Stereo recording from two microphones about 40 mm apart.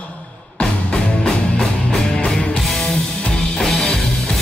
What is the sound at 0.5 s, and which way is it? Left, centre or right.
Music, left.